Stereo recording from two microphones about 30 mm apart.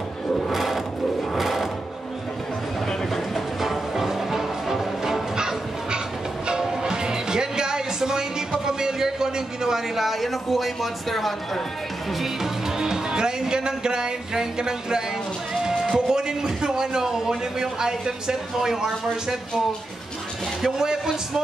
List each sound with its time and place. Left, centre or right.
0.5 s a sound: centre
1.4 s sewing machine: centre
3.3 s music: centre
6.6 s music: right
9.9 s speech: centre
12.7 s speech: right
20.6 s a man's voice: centre